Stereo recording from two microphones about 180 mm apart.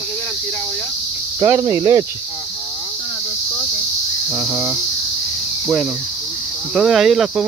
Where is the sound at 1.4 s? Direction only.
15° right (ahead or behind).